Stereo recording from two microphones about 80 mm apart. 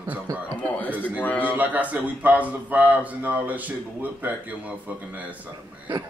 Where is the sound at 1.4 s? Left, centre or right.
Centre.